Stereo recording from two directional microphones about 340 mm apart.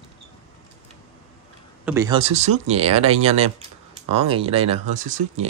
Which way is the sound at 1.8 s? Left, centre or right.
Centre.